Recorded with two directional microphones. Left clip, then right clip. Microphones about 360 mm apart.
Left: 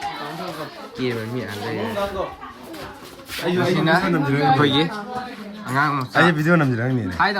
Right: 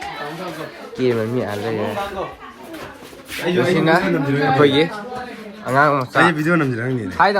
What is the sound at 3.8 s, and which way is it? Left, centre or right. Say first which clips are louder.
Speech: right 3 dB; centre.